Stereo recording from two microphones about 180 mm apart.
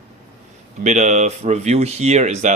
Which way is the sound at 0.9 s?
40° right (ahead or behind).